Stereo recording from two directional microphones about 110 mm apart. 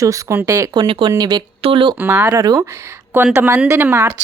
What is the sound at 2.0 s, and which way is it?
Speech, 15° right (ahead or behind).